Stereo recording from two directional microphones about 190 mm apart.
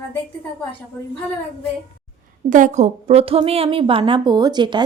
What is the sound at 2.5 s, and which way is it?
A woman's voice, 40° right (ahead or behind).